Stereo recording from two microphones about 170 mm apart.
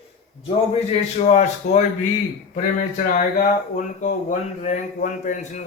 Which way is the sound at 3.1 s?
50° left (ahead or behind).